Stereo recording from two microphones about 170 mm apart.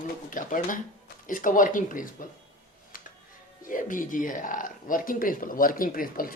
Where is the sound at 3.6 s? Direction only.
50° left (ahead or behind).